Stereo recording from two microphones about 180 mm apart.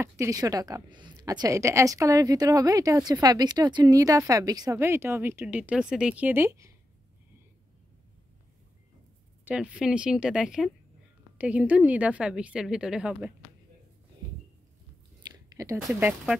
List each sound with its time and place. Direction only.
0.0 s a woman's voice: 15° right (ahead or behind)
9.4 s a woman's voice: 10° right (ahead or behind)
15.3 s a sound: 20° right (ahead or behind)
15.9 s a woman's voice: 5° right (ahead or behind)